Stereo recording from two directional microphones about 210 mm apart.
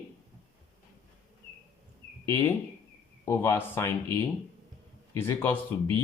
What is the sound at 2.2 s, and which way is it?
Speech, 15° left (ahead or behind).